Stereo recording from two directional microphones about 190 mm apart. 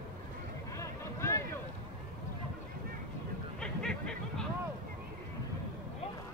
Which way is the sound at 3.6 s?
5° left (ahead or behind).